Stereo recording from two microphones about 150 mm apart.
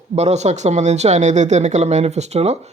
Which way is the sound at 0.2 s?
50° right (ahead or behind).